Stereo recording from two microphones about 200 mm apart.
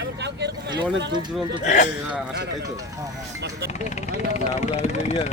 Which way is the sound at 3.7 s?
35° left (ahead or behind).